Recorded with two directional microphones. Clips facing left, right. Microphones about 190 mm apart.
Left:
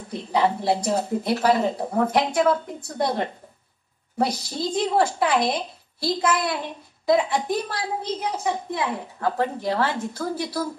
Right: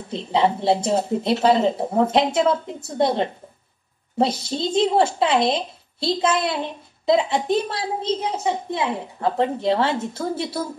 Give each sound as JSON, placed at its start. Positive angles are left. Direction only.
{"t": 0.1, "sound": "a woman's voice", "side_deg": -25}